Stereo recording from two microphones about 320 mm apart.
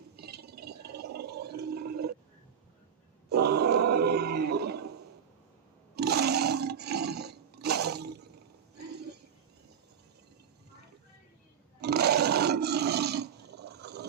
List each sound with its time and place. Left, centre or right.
0.2 s a sound: right
0.9 s gargling: right
3.2 s grunt: right
6.0 s roar: right
11.8 s roar: right